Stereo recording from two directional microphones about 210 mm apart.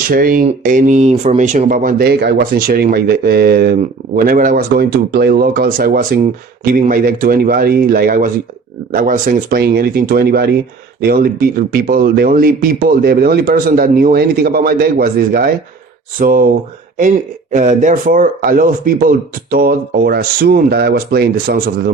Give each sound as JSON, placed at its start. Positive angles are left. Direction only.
{"t": 0.1, "sound": "speech", "side_deg": -40}
{"t": 17.5, "sound": "speech", "side_deg": -35}